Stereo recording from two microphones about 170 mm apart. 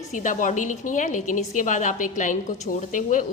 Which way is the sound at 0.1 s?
50° left (ahead or behind).